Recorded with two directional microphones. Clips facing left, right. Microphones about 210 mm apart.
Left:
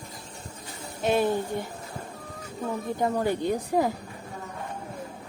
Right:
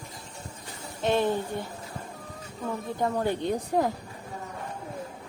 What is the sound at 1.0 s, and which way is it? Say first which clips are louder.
Speech: left 1 dB; 10° left (ahead or behind).